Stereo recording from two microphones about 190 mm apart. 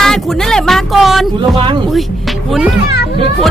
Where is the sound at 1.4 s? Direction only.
25° right (ahead or behind).